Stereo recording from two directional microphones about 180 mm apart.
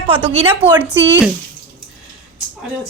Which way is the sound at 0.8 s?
10° right (ahead or behind).